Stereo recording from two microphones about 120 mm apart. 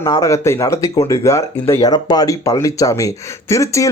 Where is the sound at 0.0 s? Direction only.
30° left (ahead or behind).